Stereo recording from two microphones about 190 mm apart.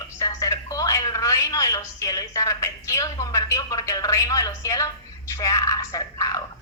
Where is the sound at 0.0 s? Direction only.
20° left (ahead or behind).